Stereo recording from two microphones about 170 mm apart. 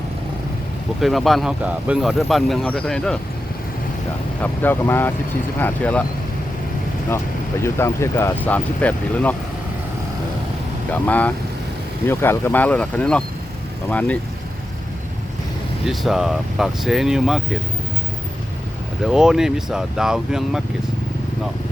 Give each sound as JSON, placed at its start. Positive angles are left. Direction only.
{"t": 1.0, "sound": "speech", "side_deg": 0}
{"t": 4.4, "sound": "speech", "side_deg": 10}
{"t": 7.6, "sound": "speech", "side_deg": 15}
{"t": 10.9, "sound": "speech", "side_deg": 10}
{"t": 15.9, "sound": "speech", "side_deg": 0}
{"t": 19.0, "sound": "speech", "side_deg": -5}